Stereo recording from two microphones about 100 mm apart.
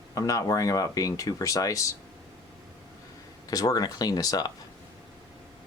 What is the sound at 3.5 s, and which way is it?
Speech, 40° left (ahead or behind).